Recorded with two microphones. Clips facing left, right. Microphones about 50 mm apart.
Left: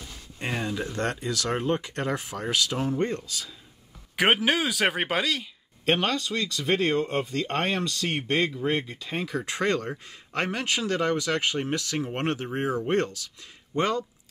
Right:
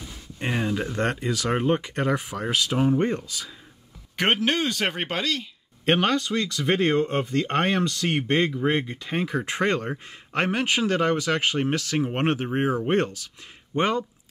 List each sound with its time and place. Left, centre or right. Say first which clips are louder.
0.4 s speech: right 3 dB; right
4.2 s speech: even; centre
5.9 s speech: right 4 dB; right
8.6 s speech: right 3 dB; centre
9.1 s speech: right 3 dB; right